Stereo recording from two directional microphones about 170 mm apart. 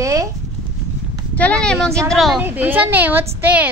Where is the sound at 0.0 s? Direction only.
20° right (ahead or behind).